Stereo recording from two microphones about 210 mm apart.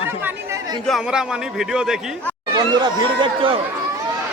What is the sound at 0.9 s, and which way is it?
A man's voice, 5° right (ahead or behind).